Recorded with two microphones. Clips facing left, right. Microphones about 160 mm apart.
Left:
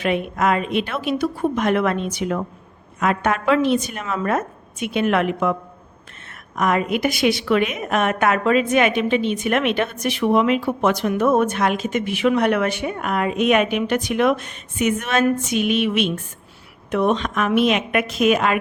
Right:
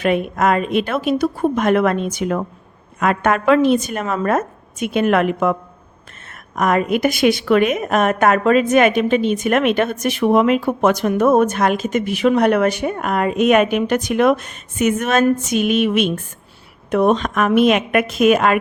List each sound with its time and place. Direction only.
0.0 s a woman's voice: 45° right (ahead or behind)
6.6 s a woman's voice: 45° right (ahead or behind)